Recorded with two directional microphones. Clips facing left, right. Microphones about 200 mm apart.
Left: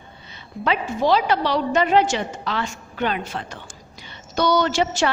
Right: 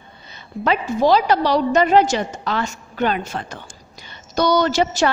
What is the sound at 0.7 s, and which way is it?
A woman's voice, 40° right (ahead or behind).